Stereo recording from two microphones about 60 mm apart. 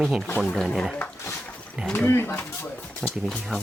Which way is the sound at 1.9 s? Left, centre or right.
Left.